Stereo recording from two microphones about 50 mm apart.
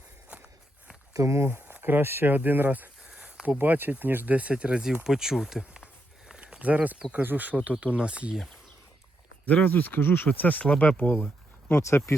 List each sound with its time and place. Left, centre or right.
1.2 s speech: right
1.6 s speech: right
3.2 s a sound: centre
3.6 s speech: right
4.4 s speech: right; by 5.8 s centre
6.2 s walk: centre
7.2 s speech: right
7.5 s speech: right
9.6 s speech: left
10.3 s speech: left
11.7 s speech: left